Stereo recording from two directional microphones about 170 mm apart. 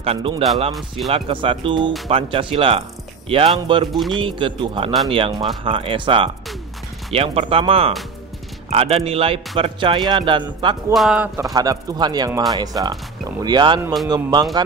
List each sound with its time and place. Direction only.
0.0 s speech: 35° right (ahead or behind)
3.9 s speech: centre (ahead or behind)
4.2 s speech: 30° right (ahead or behind)
10.9 s speech: centre (ahead or behind)
11.3 s speech: 20° right (ahead or behind)